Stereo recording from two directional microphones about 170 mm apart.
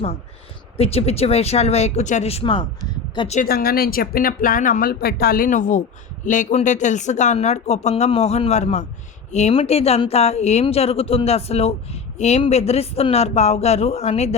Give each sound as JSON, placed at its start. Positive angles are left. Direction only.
{"t": 0.8, "sound": "speech", "side_deg": 35}
{"t": 3.4, "sound": "speech", "side_deg": 60}